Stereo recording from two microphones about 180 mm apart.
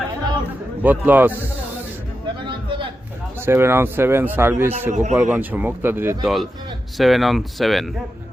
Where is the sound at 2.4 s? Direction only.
25° right (ahead or behind).